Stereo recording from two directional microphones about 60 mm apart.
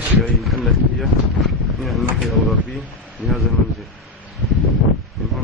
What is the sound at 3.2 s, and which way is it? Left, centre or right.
Speech, right.